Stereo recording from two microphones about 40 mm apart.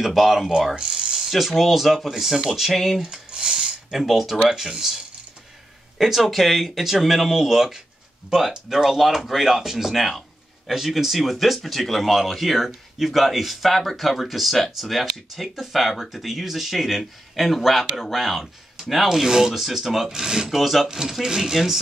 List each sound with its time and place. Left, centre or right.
0.0 s speech: centre
0.7 s speech: centre
2.7 s speech: centre
3.3 s a sound: centre
3.9 s speech: centre
20.4 s speech: centre